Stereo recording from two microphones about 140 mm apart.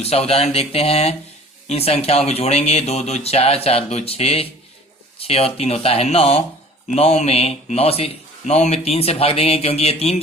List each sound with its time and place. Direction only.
0.0 s speech: 45° left (ahead or behind)